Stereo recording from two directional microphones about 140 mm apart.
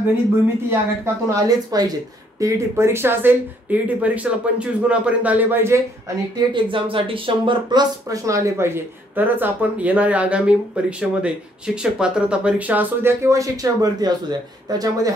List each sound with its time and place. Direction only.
0.7 s speech: 20° right (ahead or behind)
6.3 s speech: 35° right (ahead or behind)